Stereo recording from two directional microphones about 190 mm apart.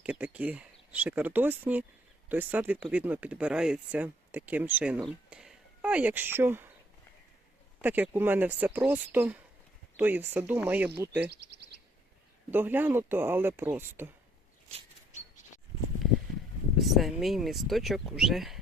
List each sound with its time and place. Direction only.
0.0 s speech: 5° right (ahead or behind)
7.8 s speech: 10° right (ahead or behind)
11.3 s speech: 60° right (ahead or behind)
12.5 s speech: 10° right (ahead or behind)
16.7 s speech: centre (ahead or behind)